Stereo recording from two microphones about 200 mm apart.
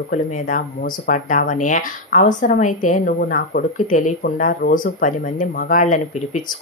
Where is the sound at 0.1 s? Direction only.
40° left (ahead or behind).